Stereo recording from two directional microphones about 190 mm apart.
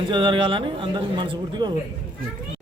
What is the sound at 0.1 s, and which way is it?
Speech, 25° right (ahead or behind).